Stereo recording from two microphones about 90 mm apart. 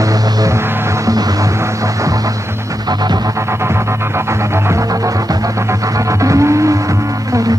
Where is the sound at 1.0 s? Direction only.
40° right (ahead or behind).